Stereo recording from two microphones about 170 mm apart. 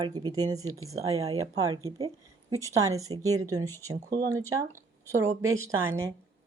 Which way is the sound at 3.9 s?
50° right (ahead or behind).